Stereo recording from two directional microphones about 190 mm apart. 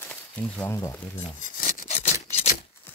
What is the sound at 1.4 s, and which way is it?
Rub, 45° left (ahead or behind).